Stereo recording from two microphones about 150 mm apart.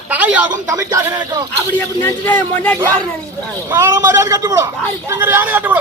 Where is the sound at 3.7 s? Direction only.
15° right (ahead or behind).